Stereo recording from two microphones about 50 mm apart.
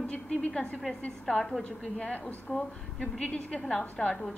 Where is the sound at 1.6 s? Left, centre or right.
Left.